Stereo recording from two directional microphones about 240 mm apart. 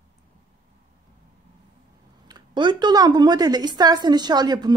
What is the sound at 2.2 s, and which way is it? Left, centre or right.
A woman's voice, centre.